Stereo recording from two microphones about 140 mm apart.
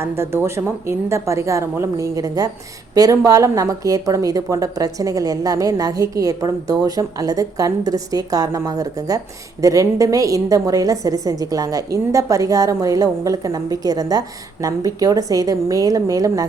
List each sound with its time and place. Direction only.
0.0 s a woman's voice: 15° right (ahead or behind)